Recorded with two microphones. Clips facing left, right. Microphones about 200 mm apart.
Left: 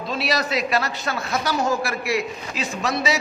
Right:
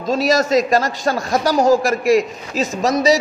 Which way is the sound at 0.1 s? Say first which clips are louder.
Right 9 dB; 45° right (ahead or behind).